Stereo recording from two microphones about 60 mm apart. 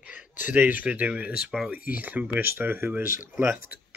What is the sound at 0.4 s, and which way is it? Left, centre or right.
Speech, right.